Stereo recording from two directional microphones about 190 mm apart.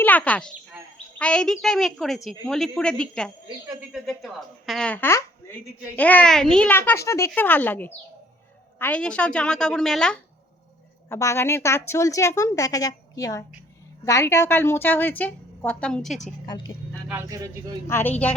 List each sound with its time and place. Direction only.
0.0 s a woman's voice: 10° left (ahead or behind)
11.1 s a woman's voice: 15° left (ahead or behind)
17.2 s speech: 20° right (ahead or behind)
17.8 s a woman's voice: 15° left (ahead or behind)